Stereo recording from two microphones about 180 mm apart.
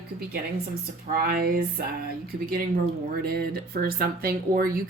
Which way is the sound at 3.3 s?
55° right (ahead or behind).